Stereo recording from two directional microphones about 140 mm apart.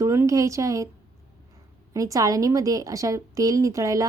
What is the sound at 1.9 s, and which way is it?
A woman's voice, 25° right (ahead or behind).